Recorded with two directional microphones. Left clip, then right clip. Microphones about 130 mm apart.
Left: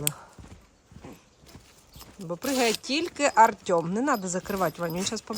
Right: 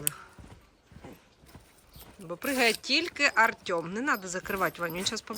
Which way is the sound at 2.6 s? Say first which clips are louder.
Right 1 dB; 20° left (ahead or behind).